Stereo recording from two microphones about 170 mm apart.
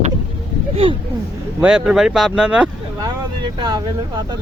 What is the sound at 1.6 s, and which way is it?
Speech, 5° right (ahead or behind).